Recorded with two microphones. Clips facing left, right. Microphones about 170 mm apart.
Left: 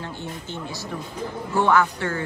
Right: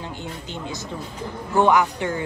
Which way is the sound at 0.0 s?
15° right (ahead or behind).